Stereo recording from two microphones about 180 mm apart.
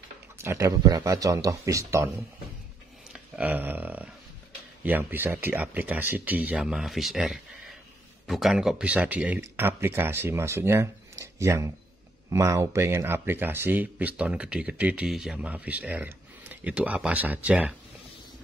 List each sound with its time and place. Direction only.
0.4 s speech: 15° right (ahead or behind)
3.1 s speech: 10° right (ahead or behind)